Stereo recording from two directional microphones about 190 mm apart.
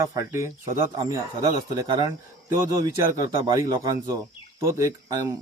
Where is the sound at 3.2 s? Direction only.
20° right (ahead or behind).